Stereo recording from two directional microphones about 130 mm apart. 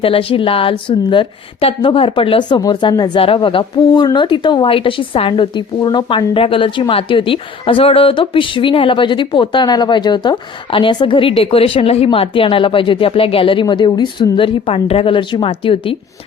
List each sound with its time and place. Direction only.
0.0 s speech: 45° left (ahead or behind)
3.2 s speech: 45° left (ahead or behind)